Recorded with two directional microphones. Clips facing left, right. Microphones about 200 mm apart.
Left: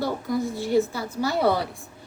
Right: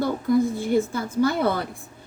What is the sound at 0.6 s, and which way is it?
A woman's voice, 50° right (ahead or behind).